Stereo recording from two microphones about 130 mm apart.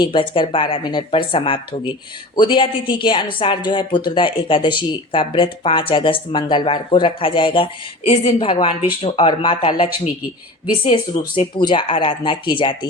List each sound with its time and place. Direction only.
0.0 s speech: 40° left (ahead or behind)